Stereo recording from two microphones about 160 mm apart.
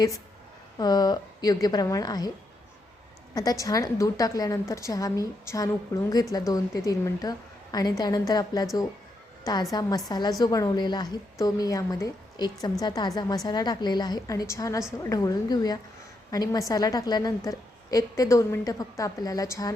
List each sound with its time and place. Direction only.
0.8 s a woman's voice: 25° left (ahead or behind)
3.3 s a woman's voice: 20° left (ahead or behind)